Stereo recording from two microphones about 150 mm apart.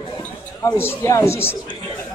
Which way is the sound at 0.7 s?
20° left (ahead or behind).